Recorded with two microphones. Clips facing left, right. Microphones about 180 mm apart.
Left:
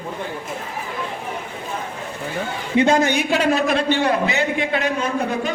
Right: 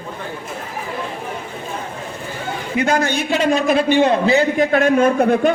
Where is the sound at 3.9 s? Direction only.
20° right (ahead or behind); by 5.5 s 55° right (ahead or behind).